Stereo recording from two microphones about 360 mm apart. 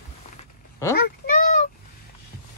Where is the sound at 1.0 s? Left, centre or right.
Left.